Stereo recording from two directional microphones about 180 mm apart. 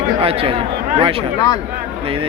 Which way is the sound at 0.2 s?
30° right (ahead or behind).